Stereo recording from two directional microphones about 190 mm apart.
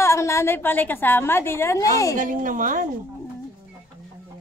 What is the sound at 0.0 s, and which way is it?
A woman's voice, 15° left (ahead or behind).